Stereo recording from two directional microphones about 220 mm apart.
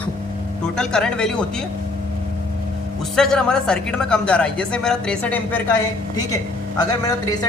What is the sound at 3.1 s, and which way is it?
Speech, 5° left (ahead or behind).